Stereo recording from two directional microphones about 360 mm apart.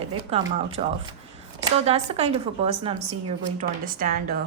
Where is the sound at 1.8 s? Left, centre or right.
Centre.